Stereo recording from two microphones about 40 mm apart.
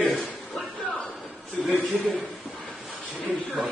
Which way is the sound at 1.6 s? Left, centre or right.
Centre.